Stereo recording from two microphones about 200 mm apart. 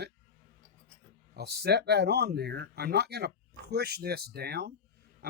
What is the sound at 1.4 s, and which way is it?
Speech, 50° right (ahead or behind).